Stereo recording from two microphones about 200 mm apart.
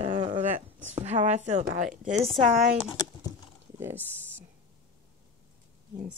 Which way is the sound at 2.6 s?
Centre (ahead or behind).